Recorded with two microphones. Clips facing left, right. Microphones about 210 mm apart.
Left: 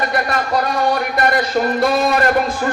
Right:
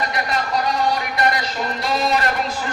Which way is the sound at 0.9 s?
50° left (ahead or behind).